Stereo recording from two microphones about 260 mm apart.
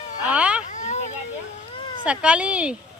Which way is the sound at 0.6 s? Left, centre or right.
Left.